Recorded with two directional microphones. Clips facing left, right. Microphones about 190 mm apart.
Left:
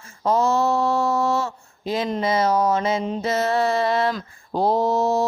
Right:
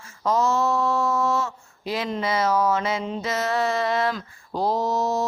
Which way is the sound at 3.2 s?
30° left (ahead or behind).